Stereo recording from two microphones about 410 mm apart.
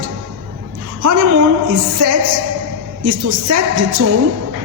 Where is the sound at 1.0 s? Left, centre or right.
Right.